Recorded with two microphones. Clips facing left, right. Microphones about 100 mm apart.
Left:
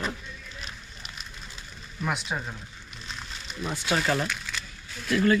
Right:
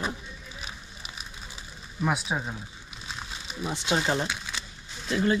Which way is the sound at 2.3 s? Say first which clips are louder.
Right 2 dB; 10° right (ahead or behind).